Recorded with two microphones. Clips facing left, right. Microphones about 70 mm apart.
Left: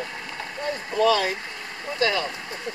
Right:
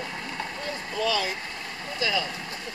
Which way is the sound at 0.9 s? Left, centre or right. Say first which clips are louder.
Left 7 dB; left.